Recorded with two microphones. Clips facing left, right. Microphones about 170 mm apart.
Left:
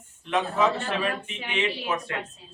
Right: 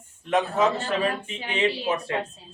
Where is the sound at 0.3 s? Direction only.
40° right (ahead or behind).